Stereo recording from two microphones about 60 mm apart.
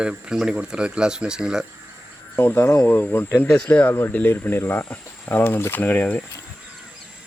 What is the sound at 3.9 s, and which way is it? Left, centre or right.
Speech, left.